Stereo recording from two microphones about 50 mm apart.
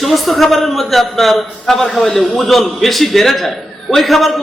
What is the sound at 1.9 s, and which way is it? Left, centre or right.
Speech, centre.